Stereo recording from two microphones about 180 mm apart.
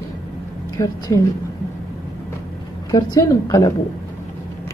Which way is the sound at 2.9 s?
20° left (ahead or behind).